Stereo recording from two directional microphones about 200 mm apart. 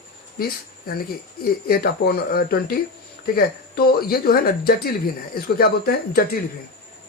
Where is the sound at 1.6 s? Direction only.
50° left (ahead or behind).